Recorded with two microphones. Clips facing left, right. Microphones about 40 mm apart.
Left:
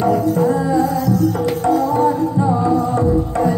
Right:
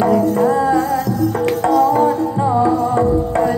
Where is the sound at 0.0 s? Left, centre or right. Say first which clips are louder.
Right 2 dB; right.